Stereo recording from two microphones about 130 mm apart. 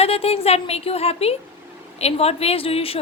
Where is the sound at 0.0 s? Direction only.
50° left (ahead or behind).